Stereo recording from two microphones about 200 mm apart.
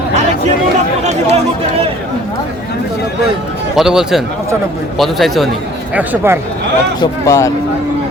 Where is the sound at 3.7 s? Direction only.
Centre (ahead or behind).